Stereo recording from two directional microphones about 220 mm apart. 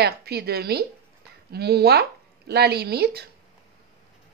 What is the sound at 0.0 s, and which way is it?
Speech, 45° right (ahead or behind).